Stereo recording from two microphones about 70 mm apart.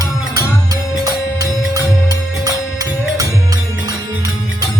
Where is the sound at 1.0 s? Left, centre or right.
Right.